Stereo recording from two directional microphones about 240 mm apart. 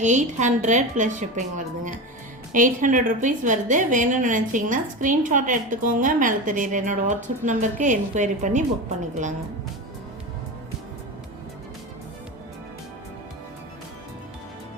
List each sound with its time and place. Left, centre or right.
0.0 s a woman's voice: right